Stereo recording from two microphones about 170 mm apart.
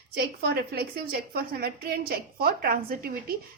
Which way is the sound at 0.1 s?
70° right (ahead or behind).